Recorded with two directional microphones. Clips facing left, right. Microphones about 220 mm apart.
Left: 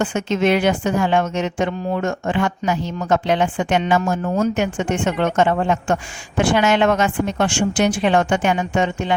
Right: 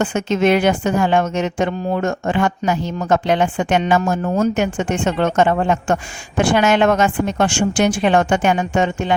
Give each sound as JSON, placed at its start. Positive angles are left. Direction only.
{"t": 0.0, "sound": "speech", "side_deg": -45}